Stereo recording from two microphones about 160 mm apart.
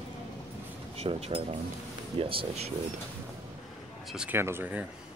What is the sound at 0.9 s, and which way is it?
Speech, 40° right (ahead or behind).